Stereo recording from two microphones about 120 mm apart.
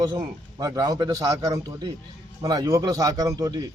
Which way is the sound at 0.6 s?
35° right (ahead or behind).